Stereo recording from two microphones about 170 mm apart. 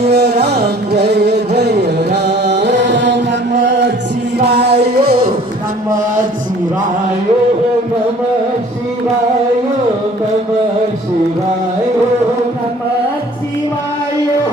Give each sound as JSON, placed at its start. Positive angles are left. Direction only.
{"t": 0.1, "sound": "music", "side_deg": -75}
{"t": 4.4, "sound": "music", "side_deg": -75}